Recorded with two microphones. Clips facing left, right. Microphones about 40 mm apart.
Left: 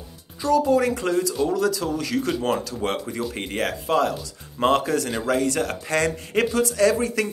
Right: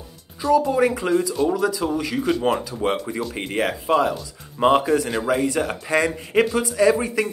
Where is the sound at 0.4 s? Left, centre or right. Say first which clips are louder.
Right 1 dB; centre.